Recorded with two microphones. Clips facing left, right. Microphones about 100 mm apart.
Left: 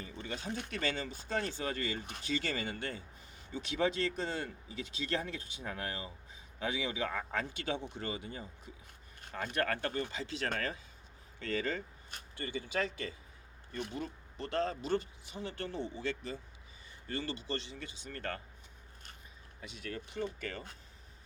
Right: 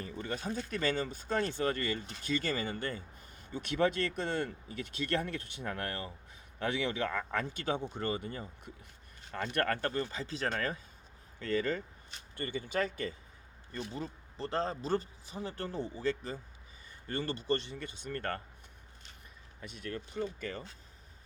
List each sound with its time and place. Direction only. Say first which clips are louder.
0.0 s a sound: right 4 dB; 50° right (ahead or behind)
0.7 s speech: right 5 dB; 45° right (ahead or behind)
2.0 s speech: left 1 dB; 55° left (ahead or behind)
2.2 s speech: right 3 dB; 45° right (ahead or behind)
7.5 s speech: right 3 dB; 45° right (ahead or behind)
9.8 s speech: right 2 dB; 40° right (ahead or behind)
13.9 s speech: even; 30° right (ahead or behind)
19.6 s speech: right 2 dB; 50° right (ahead or behind)